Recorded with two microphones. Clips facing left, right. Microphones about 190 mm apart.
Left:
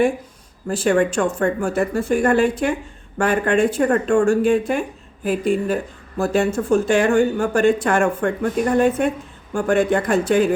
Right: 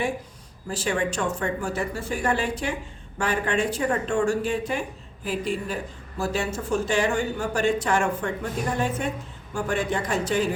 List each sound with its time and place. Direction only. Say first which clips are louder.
0.7 s speech: left 9 dB; 55° left (ahead or behind)